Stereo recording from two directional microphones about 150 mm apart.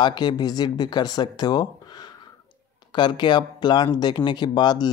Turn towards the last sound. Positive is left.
turn(degrees=30)  # may be behind; listen again after turning